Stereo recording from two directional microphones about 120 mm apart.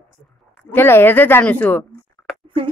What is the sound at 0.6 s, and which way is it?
Speech, 20° left (ahead or behind).